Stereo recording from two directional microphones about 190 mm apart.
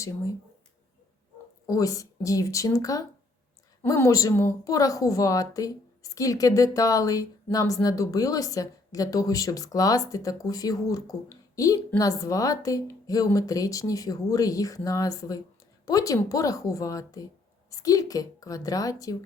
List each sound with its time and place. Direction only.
1.6 s a woman's voice: 15° left (ahead or behind)